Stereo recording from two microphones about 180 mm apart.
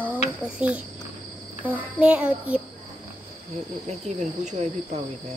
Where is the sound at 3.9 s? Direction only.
40° right (ahead or behind).